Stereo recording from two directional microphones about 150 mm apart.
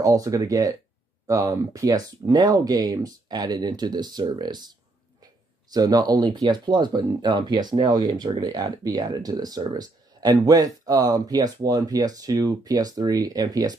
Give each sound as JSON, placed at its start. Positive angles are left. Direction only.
{"t": 0.0, "sound": "speech", "side_deg": -20}